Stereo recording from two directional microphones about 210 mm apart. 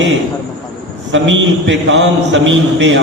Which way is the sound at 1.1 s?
60° right (ahead or behind).